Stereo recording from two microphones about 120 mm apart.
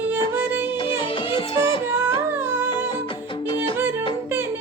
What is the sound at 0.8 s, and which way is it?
Music, 45° left (ahead or behind).